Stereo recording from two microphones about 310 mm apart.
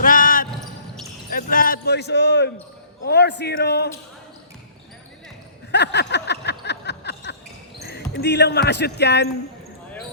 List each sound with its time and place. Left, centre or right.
0.0 s basketball bounce: left
3.0 s speech: left
5.7 s a sound: left
8.1 s speech: left